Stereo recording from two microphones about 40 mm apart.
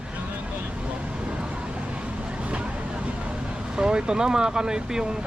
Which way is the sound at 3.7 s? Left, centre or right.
Centre.